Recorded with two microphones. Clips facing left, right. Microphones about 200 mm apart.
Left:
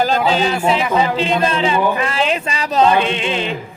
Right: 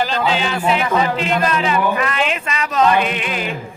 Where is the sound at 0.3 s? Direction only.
40° left (ahead or behind).